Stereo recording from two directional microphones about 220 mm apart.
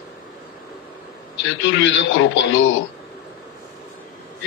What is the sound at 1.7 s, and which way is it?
Speech, 60° left (ahead or behind).